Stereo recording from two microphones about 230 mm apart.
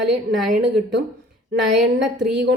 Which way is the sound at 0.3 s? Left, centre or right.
Right.